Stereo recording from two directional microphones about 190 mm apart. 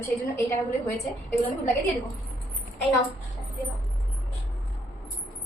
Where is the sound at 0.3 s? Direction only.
15° left (ahead or behind).